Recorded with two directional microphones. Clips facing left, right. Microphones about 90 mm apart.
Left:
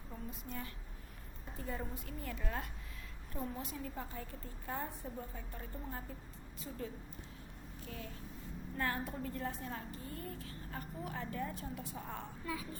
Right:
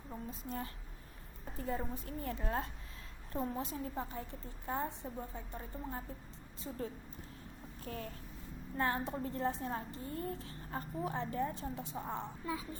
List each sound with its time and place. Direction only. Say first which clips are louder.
0.1 s a woman's voice: right 3 dB; 35° right (ahead or behind)
7.9 s speech: right 5 dB; 45° right (ahead or behind)
8.8 s a woman's voice: right 3 dB; 30° right (ahead or behind)